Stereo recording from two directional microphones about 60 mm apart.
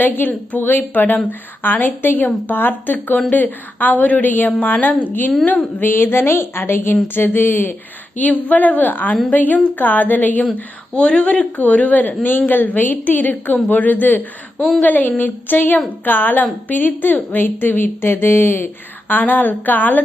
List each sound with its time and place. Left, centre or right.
0.0 s a woman's voice: left
10.9 s a woman's voice: centre